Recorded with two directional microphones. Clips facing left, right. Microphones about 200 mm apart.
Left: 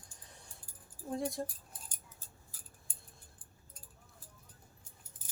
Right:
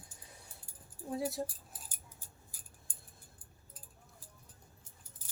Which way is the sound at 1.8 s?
10° right (ahead or behind).